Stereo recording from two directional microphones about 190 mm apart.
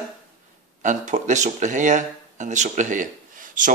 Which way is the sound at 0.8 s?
40° right (ahead or behind).